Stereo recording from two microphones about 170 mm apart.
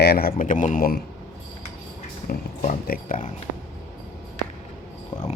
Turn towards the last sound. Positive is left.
turn(degrees=25)  # may be behind; listen again after turning